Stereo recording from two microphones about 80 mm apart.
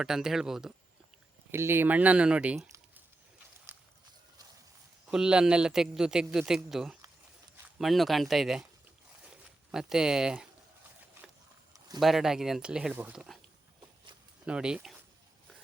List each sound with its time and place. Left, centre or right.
0.0 s speech: centre
1.5 s speech: right; by 2.6 s centre
5.1 s a man's voice: centre
9.7 s a man's voice: centre
11.9 s speech: centre
13.1 s speech: centre
14.4 s a man's voice: centre